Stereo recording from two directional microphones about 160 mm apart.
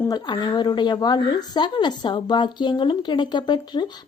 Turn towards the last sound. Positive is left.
turn(degrees=25)  # may be behind; listen again after turning